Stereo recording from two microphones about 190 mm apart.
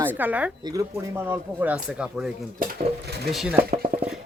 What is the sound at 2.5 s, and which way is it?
Speech, 55° right (ahead or behind).